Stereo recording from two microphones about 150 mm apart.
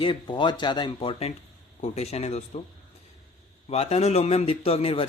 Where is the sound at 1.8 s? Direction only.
45° left (ahead or behind).